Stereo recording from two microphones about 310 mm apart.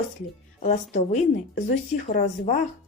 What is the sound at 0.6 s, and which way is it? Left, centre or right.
Speech, left.